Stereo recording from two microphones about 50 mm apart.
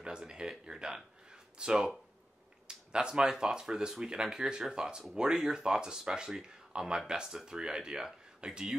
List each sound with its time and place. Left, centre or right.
0.0 s speech: centre